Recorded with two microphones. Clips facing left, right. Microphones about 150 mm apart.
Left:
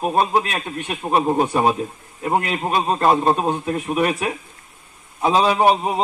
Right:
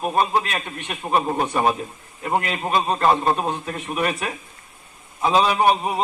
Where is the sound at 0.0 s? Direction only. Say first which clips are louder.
Left 2 dB; 30° left (ahead or behind).